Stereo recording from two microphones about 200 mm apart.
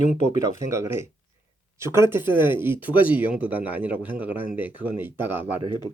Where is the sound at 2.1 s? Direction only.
10° right (ahead or behind).